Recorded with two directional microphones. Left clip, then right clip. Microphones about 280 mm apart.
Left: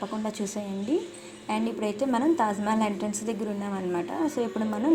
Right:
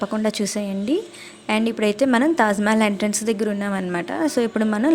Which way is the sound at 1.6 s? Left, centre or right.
Right.